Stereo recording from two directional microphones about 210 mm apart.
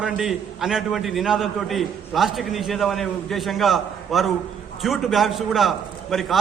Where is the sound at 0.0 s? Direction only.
Centre (ahead or behind).